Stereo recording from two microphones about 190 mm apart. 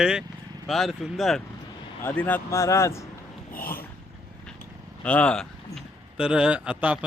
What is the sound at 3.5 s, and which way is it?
Dog, 50° left (ahead or behind).